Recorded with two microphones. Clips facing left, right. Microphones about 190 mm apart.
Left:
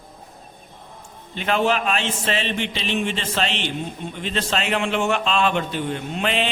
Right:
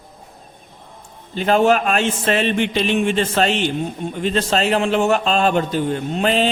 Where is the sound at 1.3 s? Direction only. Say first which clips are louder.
Right 6 dB; 40° right (ahead or behind).